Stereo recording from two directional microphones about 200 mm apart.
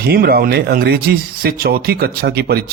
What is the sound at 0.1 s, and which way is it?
Speech, 50° right (ahead or behind).